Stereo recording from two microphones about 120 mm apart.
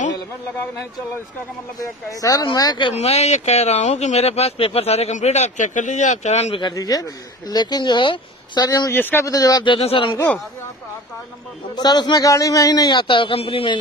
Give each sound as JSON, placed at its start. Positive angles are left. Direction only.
{"t": 1.8, "sound": "a man's voice", "side_deg": 30}
{"t": 2.9, "sound": "speech", "side_deg": 60}
{"t": 6.7, "sound": "a man's voice", "side_deg": 30}
{"t": 8.6, "sound": "a man's voice", "side_deg": 30}
{"t": 8.9, "sound": "a man's voice", "side_deg": 20}
{"t": 9.8, "sound": "speech", "side_deg": 50}
{"t": 10.1, "sound": "speech", "side_deg": 15}
{"t": 11.7, "sound": "a man's voice", "side_deg": 35}